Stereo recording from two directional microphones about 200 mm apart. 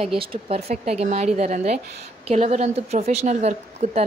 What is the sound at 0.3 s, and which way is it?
A woman's voice, 30° right (ahead or behind).